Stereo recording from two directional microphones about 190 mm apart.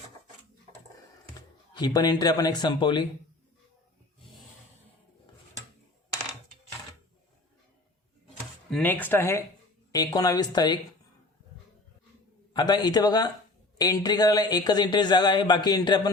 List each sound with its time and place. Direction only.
1.7 s speech: 20° left (ahead or behind)
8.7 s speech: 10° left (ahead or behind)
12.5 s speech: 20° left (ahead or behind)